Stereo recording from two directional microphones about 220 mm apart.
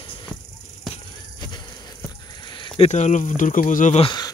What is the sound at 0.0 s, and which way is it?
Music, 20° left (ahead or behind).